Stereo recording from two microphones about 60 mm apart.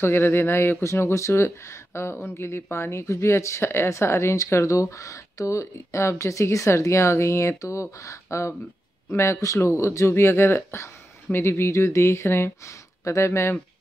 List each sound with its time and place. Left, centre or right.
0.0 s speech: left
9.6 s speech: left
13.0 s speech: left